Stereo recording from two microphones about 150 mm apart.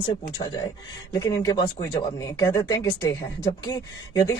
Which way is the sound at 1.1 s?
25° left (ahead or behind).